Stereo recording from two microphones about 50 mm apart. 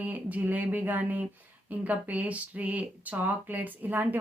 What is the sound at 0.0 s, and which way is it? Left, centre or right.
Speech, right.